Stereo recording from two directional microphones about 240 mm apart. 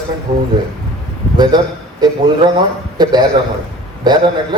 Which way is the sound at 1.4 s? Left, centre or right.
Centre.